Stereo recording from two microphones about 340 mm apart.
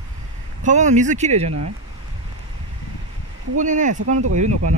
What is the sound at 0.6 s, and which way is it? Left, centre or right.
Speech, right.